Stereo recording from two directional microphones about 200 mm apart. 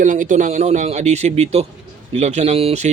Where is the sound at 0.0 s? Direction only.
40° right (ahead or behind).